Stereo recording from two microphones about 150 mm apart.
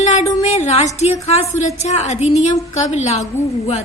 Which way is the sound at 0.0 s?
50° left (ahead or behind).